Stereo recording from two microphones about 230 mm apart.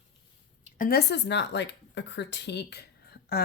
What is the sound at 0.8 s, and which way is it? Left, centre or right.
Speech, left.